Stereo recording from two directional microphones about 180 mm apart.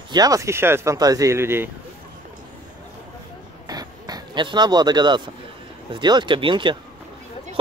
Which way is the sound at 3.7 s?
20° right (ahead or behind).